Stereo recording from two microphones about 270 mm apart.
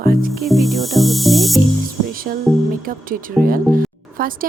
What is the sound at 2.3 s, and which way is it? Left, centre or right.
Speech, right.